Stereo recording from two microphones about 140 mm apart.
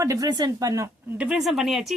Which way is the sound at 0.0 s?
25° right (ahead or behind).